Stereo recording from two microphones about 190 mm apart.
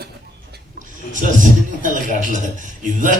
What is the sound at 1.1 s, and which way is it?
A man's voice, 40° right (ahead or behind).